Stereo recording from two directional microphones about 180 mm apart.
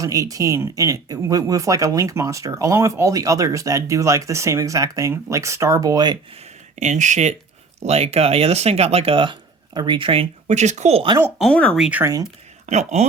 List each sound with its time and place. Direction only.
0.0 s speech: 20° right (ahead or behind)
6.7 s speech: 40° right (ahead or behind)
11.3 s speech: 5° left (ahead or behind)
11.9 s speech: 15° right (ahead or behind)
12.6 s speech: 40° right (ahead or behind)